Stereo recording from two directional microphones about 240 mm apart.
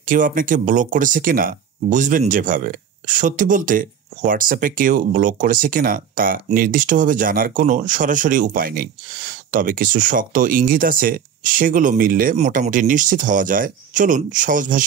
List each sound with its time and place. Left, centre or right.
0.0 s speech: right